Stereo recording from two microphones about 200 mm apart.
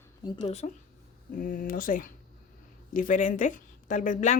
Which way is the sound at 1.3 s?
45° left (ahead or behind).